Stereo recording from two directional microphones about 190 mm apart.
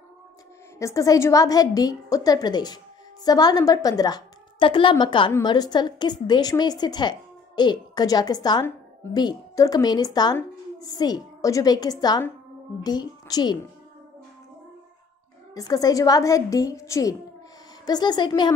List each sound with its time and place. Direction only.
0.7 s a woman's voice: 15° left (ahead or behind)
15.5 s a woman's voice: 20° left (ahead or behind)